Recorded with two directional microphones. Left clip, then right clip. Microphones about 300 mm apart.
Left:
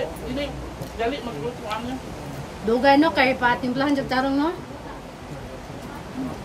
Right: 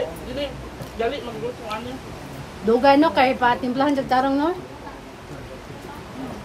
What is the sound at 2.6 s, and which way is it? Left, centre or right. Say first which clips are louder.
A woman's voice: right 2 dB; centre.